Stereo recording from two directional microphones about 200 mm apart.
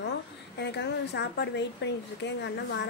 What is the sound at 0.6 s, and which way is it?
Speech, 60° left (ahead or behind).